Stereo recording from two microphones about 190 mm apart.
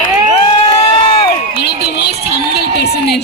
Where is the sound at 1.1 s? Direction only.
30° left (ahead or behind).